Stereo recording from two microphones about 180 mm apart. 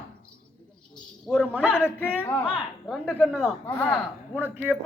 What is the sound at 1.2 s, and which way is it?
Speech, centre (ahead or behind).